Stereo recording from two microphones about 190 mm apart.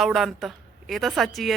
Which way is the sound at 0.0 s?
Centre (ahead or behind).